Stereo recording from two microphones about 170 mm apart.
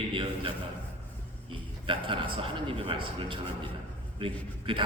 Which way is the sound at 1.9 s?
30° right (ahead or behind).